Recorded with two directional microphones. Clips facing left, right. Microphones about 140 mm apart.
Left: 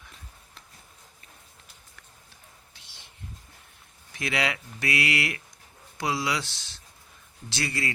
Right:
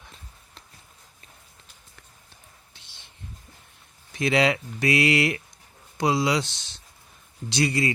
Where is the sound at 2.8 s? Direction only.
25° right (ahead or behind).